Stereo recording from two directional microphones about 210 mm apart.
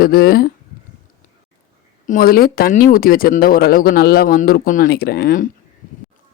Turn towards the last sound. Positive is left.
turn(degrees=40)  # may be behind; listen again after turning